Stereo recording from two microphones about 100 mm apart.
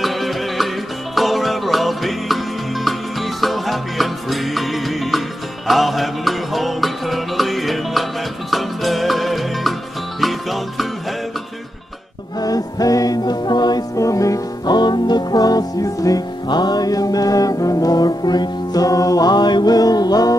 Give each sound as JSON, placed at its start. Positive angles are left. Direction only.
{"t": 0.0, "sound": "music", "side_deg": 0}
{"t": 12.4, "sound": "music", "side_deg": 40}